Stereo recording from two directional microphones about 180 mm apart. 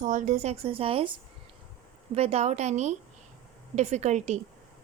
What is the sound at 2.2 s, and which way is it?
A woman's voice, 35° right (ahead or behind).